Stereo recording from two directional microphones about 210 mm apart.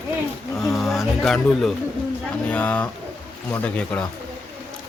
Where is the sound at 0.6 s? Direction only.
Centre (ahead or behind).